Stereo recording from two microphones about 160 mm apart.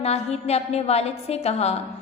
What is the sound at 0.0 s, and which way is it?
A woman's voice, 40° left (ahead or behind).